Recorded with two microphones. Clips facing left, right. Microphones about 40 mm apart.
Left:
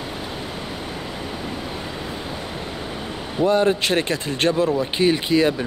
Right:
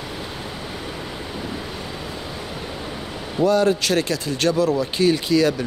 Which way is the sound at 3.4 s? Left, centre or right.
Left.